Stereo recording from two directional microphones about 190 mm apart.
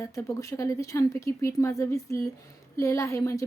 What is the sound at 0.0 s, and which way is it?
Speech, 15° left (ahead or behind).